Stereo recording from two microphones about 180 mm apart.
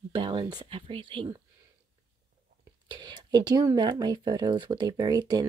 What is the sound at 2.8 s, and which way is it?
Speech, 25° right (ahead or behind).